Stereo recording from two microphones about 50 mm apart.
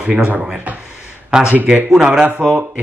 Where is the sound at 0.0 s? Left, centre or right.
Right.